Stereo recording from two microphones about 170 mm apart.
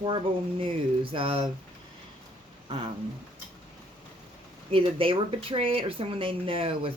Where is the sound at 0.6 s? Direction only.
30° right (ahead or behind).